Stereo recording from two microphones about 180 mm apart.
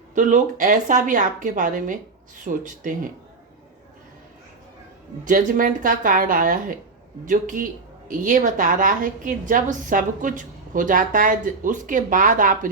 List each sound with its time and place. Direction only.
0.1 s speech: 45° right (ahead or behind)
5.2 s speech: 45° right (ahead or behind)